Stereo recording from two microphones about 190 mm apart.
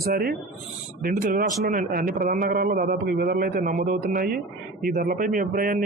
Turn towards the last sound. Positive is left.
turn(degrees=-50)  # may be behind; listen again after turning